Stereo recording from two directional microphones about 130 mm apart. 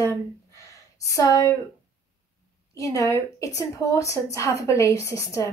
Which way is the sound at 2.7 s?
25° left (ahead or behind).